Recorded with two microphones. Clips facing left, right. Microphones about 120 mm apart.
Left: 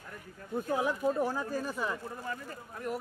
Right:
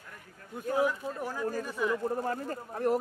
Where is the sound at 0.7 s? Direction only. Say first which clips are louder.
Right 1 dB; 30° left (ahead or behind).